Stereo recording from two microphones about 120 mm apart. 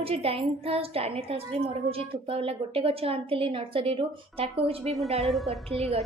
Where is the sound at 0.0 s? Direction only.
55° right (ahead or behind).